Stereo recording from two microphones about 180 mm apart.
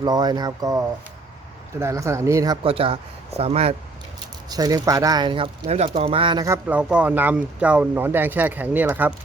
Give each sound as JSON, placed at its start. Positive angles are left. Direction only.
{"t": 0.0, "sound": "speech", "side_deg": -20}
{"t": 4.4, "sound": "speech", "side_deg": -20}
{"t": 6.4, "sound": "speech", "side_deg": -10}